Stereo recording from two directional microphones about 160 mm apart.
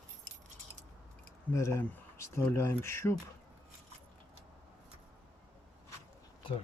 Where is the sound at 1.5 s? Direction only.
15° left (ahead or behind).